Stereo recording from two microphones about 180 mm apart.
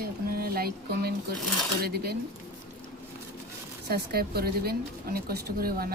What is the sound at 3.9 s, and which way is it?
Speech, 60° right (ahead or behind).